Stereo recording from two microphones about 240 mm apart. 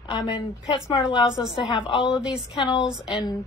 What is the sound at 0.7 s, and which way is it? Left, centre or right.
A woman's voice, centre.